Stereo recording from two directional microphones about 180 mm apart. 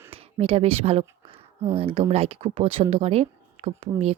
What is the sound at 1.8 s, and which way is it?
Speech, 30° right (ahead or behind).